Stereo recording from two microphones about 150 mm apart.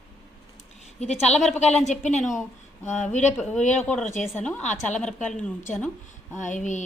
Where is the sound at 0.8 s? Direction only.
45° left (ahead or behind).